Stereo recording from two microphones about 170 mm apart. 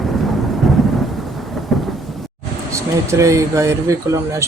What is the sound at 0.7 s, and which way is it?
Thunder, centre (ahead or behind).